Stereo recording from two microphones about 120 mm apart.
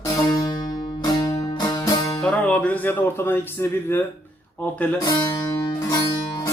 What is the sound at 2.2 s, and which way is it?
Music, 10° left (ahead or behind).